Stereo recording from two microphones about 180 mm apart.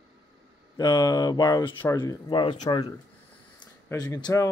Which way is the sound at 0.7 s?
20° left (ahead or behind).